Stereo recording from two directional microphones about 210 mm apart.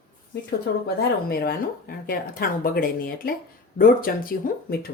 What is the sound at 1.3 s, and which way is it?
Speech, 45° left (ahead or behind).